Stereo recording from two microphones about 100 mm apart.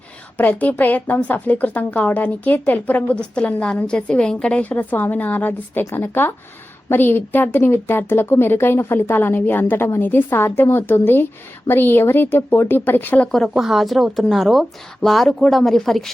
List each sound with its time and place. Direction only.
0.3 s a woman's voice: 15° left (ahead or behind)
13.2 s speech: 5° left (ahead or behind)